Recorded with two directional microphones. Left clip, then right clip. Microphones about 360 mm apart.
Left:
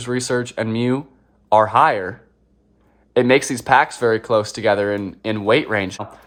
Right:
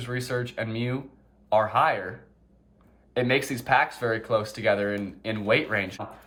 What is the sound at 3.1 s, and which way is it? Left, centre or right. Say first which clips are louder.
Speech: left 9 dB; centre.